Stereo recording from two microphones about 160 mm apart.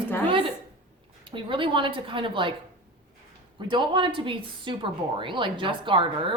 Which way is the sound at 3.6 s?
30° right (ahead or behind).